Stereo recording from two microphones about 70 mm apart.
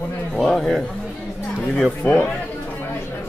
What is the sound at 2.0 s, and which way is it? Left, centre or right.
Speech, left.